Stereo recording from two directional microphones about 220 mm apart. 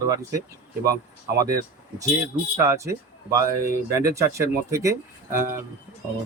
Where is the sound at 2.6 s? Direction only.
15° right (ahead or behind).